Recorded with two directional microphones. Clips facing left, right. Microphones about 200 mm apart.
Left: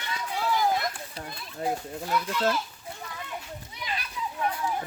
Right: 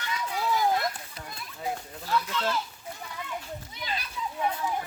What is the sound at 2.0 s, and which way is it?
Speech, 15° left (ahead or behind).